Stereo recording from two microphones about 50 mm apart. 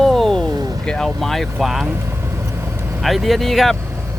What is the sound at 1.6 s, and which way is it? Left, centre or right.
Speech, centre.